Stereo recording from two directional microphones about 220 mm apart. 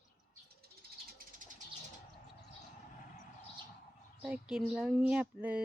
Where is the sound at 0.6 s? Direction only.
45° right (ahead or behind).